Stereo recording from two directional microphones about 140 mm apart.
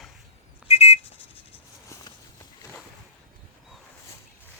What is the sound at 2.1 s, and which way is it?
Walk, 30° left (ahead or behind).